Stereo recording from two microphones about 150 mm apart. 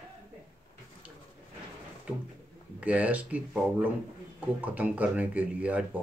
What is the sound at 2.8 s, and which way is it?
Speech, 10° right (ahead or behind).